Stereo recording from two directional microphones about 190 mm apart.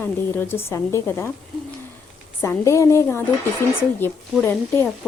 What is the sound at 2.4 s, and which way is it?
Speech, 15° left (ahead or behind).